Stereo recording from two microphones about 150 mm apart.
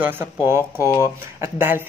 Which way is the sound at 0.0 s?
15° right (ahead or behind).